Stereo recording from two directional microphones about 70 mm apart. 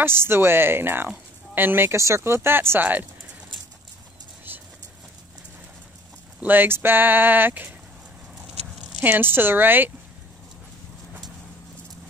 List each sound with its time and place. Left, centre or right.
0.0 s speech: right
2.0 s speech: right
4.5 s vehicle: right
6.4 s speech: right
9.0 s speech: right